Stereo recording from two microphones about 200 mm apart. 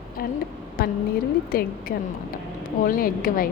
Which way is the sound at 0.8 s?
50° left (ahead or behind).